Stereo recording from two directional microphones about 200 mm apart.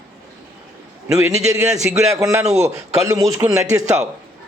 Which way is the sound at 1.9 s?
10° right (ahead or behind).